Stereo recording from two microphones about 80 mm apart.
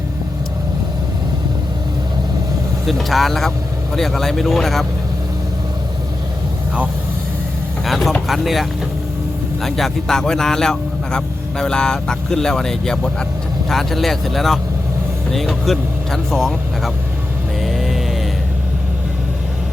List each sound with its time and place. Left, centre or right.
2.8 s speech: centre
7.9 s vehicle: centre
8.3 s speech: centre
9.6 s a man's voice: centre
17.6 s vehicle: centre